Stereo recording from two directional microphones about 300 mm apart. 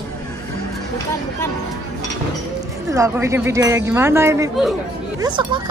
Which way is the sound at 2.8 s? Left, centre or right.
Centre.